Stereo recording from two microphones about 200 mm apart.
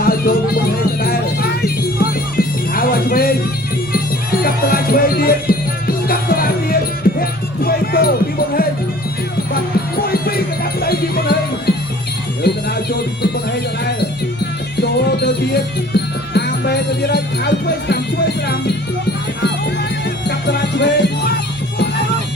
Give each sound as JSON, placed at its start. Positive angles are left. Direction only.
{"t": 0.0, "sound": "music", "side_deg": 45}
{"t": 10.0, "sound": "music", "side_deg": 50}
{"t": 14.8, "sound": "music", "side_deg": 55}
{"t": 20.2, "sound": "music", "side_deg": 55}